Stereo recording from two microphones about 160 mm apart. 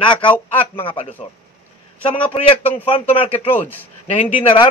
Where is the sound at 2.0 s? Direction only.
35° left (ahead or behind).